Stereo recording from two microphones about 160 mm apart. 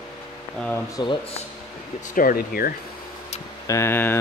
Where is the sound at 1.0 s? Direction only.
30° left (ahead or behind).